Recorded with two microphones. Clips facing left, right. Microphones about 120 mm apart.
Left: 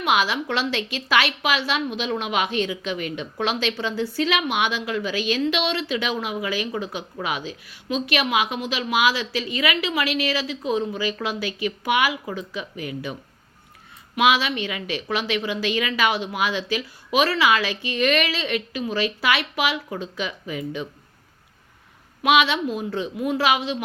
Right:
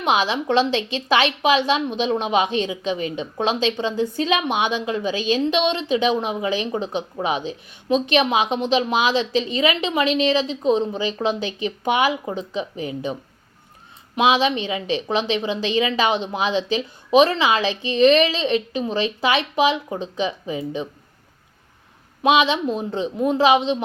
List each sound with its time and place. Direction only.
0.0 s a woman's voice: 20° right (ahead or behind)
14.2 s a woman's voice: 20° right (ahead or behind)
22.2 s a woman's voice: 20° right (ahead or behind)
23.1 s speech: 35° right (ahead or behind)
23.4 s a woman's voice: 20° right (ahead or behind)